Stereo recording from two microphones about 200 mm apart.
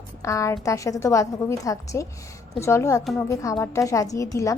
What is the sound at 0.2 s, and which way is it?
A woman's voice, 15° left (ahead or behind).